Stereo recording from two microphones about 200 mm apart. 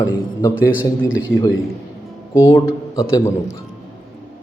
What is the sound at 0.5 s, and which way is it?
Speech, 5° right (ahead or behind).